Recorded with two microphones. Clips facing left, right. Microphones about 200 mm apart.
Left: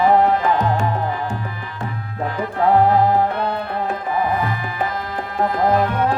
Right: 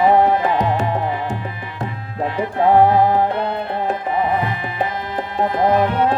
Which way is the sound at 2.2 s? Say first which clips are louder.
Right 2 dB; 20° right (ahead or behind).